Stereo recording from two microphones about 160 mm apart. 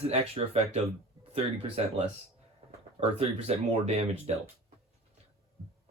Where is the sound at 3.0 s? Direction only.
40° right (ahead or behind).